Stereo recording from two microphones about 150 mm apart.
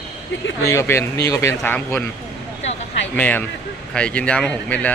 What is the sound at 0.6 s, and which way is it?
Speech, 20° left (ahead or behind).